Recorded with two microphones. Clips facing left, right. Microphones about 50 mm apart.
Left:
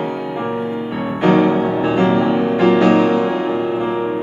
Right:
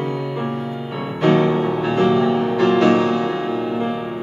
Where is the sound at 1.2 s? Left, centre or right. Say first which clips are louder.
Left 2 dB; centre.